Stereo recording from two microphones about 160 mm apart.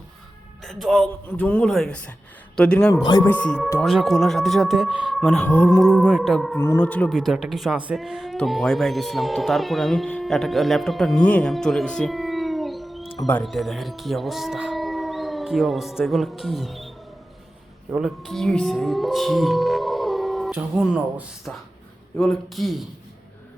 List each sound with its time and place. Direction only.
0.6 s speech: centre (ahead or behind)
2.9 s speech: 25° left (ahead or behind)
3.2 s speech: 10° left (ahead or behind)
5.4 s speech: 10° left (ahead or behind)
6.1 s speech: centre (ahead or behind)
6.6 s speech: 10° left (ahead or behind)
13.0 s music: 35° left (ahead or behind)
13.4 s speech: centre (ahead or behind)
17.9 s speech: centre (ahead or behind)